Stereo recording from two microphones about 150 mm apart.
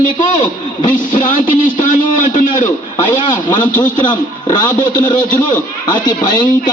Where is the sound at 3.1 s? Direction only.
30° left (ahead or behind).